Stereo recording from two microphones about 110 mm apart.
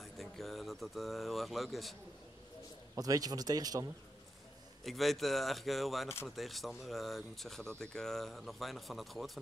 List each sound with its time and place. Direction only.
0.0 s speech: centre (ahead or behind)
3.0 s speech: 35° right (ahead or behind)
4.8 s speech: centre (ahead or behind)